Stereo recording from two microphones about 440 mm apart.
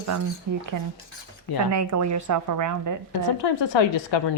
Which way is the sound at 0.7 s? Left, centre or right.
Right.